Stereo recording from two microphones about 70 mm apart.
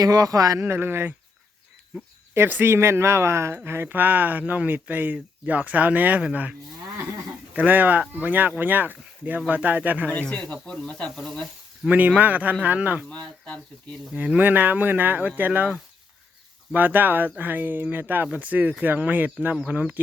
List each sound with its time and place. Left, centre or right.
0.0 s speech: right
0.7 s speech: right
2.3 s speech: right
10.2 s speech: centre
11.9 s speech: right
13.1 s speech: centre
14.1 s speech: centre
16.7 s speech: right